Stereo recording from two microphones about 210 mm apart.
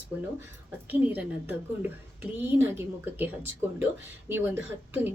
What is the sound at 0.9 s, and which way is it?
Speech, 10° right (ahead or behind).